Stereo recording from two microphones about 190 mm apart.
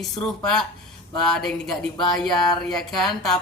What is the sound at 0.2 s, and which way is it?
A woman's voice, 5° left (ahead or behind).